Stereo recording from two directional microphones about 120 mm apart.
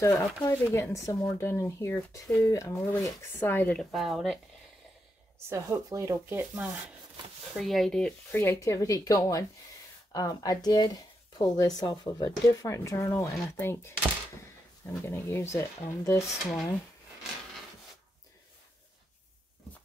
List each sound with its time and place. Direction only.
0.0 s speech: 20° left (ahead or behind)
3.9 s speech: centre (ahead or behind)
5.5 s speech: 25° right (ahead or behind)
6.2 s speech: 15° right (ahead or behind)
7.5 s speech: centre (ahead or behind); by 16.3 s 25° left (ahead or behind)